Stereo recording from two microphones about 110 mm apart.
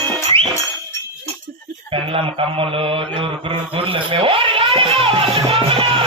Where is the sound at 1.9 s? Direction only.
55° right (ahead or behind).